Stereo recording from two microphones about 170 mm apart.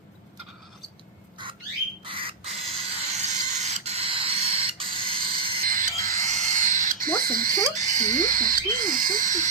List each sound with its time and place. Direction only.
2.0 s bird: 30° right (ahead or behind)
2.7 s a sound: 35° right (ahead or behind)
5.6 s owl: 50° right (ahead or behind)